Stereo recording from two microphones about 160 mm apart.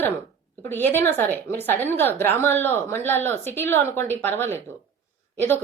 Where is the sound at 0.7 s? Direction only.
10° left (ahead or behind).